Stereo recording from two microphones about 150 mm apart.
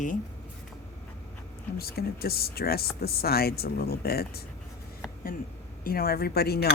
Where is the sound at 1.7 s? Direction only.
90° left.